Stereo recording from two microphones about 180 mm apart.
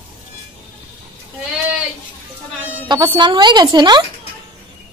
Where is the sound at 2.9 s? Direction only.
25° right (ahead or behind).